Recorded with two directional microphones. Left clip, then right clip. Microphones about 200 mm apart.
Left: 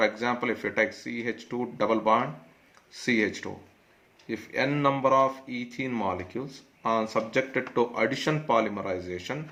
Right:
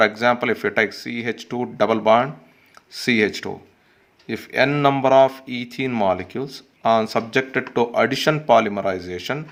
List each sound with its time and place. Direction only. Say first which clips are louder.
0.0 s speech: right 9 dB; 45° right (ahead or behind)